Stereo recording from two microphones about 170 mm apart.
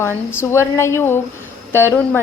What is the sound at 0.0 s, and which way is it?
A woman's voice, 15° left (ahead or behind).